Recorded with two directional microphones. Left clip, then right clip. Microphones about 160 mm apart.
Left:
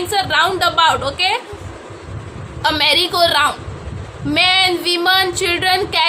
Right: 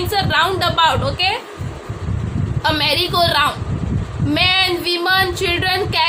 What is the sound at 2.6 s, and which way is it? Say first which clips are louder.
Female singing: left 3 dB; 25° left (ahead or behind).